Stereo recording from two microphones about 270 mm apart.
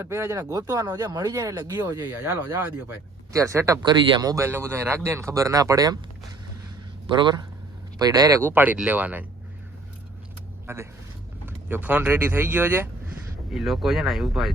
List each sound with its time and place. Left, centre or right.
0.0 s speech: centre
7.2 s speech: centre
10.7 s speech: centre